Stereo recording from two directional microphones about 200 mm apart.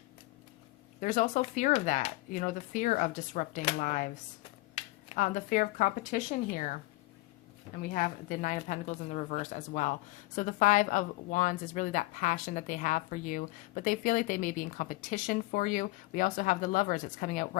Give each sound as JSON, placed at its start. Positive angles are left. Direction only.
{"t": 1.0, "sound": "a woman's voice", "side_deg": 40}
{"t": 7.9, "sound": "a woman's voice", "side_deg": 40}